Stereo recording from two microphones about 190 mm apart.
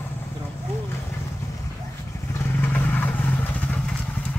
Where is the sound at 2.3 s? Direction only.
10° left (ahead or behind).